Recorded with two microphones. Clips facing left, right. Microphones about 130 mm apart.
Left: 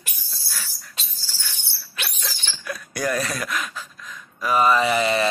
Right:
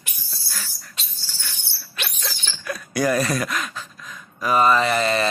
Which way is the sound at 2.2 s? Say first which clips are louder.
Right 3 dB; centre (ahead or behind).